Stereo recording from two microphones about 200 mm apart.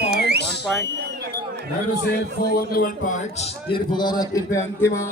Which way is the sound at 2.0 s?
50° left (ahead or behind).